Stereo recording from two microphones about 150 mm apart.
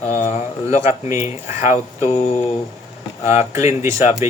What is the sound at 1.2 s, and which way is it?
Speech, 20° right (ahead or behind).